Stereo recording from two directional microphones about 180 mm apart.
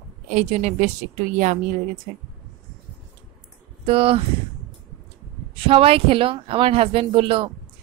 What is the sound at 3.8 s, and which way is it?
Speech, 30° right (ahead or behind).